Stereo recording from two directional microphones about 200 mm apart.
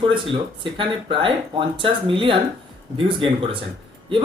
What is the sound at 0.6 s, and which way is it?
Speech, 25° right (ahead or behind).